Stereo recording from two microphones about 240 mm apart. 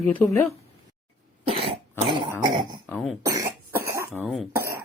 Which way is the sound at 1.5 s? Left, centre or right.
Right.